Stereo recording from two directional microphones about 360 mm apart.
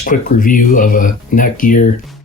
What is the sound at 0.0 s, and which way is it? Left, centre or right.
Speech, left.